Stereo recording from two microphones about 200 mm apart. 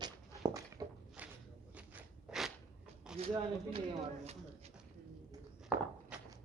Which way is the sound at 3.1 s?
5° right (ahead or behind).